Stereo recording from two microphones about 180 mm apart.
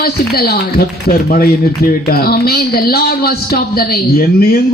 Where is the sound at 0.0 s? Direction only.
60° left (ahead or behind).